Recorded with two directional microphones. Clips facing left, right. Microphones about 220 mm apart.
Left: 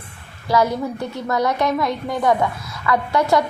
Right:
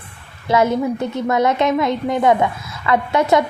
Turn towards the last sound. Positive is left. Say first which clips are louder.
# right 2 dB
turn(degrees=-20)  # may be behind; listen again after turning